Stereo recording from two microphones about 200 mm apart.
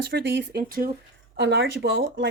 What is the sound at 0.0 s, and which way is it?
Speech, 55° right (ahead or behind).